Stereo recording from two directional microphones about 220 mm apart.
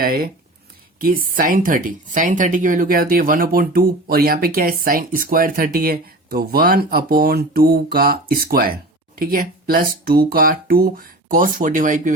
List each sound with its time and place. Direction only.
0.0 s speech: 40° right (ahead or behind)